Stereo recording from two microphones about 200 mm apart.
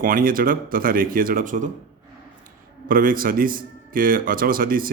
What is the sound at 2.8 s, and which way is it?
Speech, 45° right (ahead or behind).